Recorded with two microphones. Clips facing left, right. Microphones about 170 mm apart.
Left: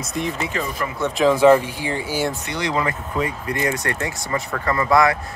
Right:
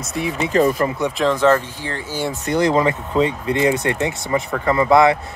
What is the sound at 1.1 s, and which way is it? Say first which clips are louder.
Speech: left 4 dB; 5° left (ahead or behind).